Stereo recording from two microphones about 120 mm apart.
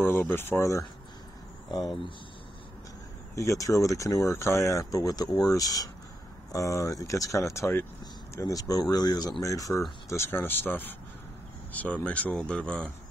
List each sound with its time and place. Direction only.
0.0 s speech: 20° left (ahead or behind)
3.3 s speech: 25° left (ahead or behind); by 12.9 s 10° left (ahead or behind)